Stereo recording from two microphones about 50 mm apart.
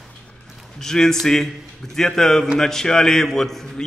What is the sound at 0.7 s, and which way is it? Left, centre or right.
A man's voice, centre.